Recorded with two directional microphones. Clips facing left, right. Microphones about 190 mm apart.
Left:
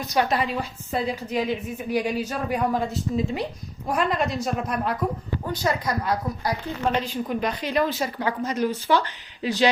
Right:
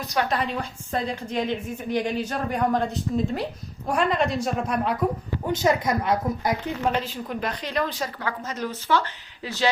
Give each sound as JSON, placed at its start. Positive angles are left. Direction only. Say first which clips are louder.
{"t": 0.3, "sound": "a woman's voice", "louder": "left 1 dB", "side_deg": 5}
{"t": 5.5, "sound": "a woman's voice", "louder": "right 4 dB", "side_deg": -25}
{"t": 6.9, "sound": "a woman's voice", "louder": "left 2 dB", "side_deg": 0}